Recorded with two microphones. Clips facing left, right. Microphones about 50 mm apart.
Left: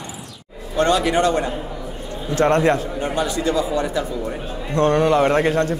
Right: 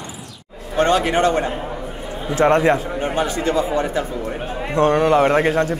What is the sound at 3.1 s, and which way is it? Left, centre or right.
Speech, right.